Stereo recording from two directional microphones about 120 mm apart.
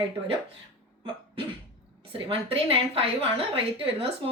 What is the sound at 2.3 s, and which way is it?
A woman's voice, 50° right (ahead or behind).